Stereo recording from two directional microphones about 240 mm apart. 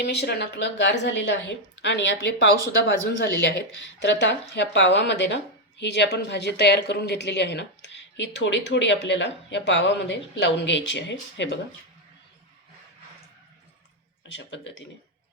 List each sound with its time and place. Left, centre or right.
0.0 s speech: left
14.3 s speech: left